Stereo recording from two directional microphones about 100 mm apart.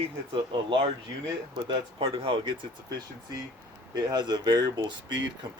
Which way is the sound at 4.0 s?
45° right (ahead or behind).